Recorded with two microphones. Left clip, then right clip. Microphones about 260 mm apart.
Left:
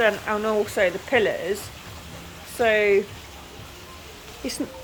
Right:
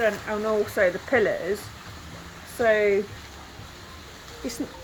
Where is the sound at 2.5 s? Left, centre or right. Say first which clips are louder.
Left 2 dB; centre.